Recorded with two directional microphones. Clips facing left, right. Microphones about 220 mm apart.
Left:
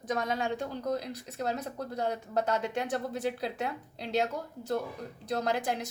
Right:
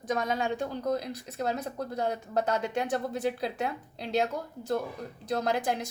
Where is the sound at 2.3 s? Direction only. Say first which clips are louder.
Right 1 dB; 45° right (ahead or behind).